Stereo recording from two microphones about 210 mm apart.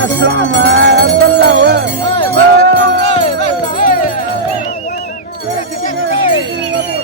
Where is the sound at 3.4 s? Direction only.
40° left (ahead or behind).